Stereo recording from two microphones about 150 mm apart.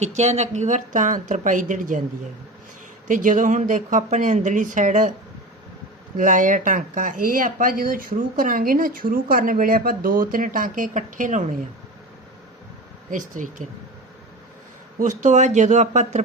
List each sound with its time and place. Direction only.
0.0 s speech: 50° right (ahead or behind)
3.1 s speech: 60° right (ahead or behind)
6.1 s speech: 60° right (ahead or behind)
13.1 s speech: 60° right (ahead or behind)
14.9 s a man's voice: 55° right (ahead or behind)